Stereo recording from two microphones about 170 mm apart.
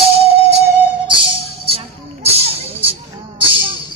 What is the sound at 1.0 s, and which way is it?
Music, 30° right (ahead or behind).